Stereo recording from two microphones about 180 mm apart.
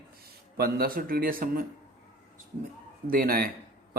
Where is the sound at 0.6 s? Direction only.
55° right (ahead or behind).